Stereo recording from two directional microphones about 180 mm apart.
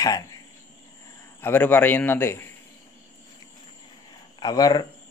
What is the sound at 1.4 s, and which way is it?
A man's voice, 10° left (ahead or behind).